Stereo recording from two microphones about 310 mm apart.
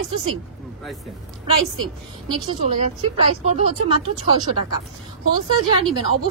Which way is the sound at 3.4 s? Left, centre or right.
Right.